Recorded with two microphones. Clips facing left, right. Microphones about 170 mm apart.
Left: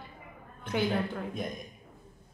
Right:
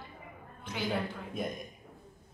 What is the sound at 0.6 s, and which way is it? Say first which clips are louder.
Speech: left 7 dB; 55° left (ahead or behind).